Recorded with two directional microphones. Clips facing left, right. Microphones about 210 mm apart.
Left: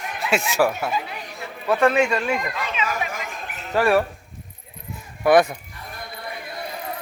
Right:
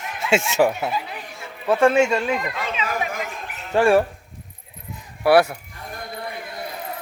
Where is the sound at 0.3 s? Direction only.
25° right (ahead or behind).